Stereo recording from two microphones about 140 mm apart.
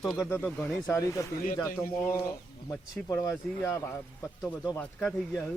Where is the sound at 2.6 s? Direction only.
25° left (ahead or behind).